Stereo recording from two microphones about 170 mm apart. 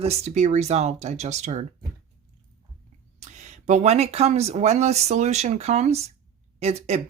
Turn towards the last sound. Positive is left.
turn(degrees=-40)  # may be behind; listen again after turning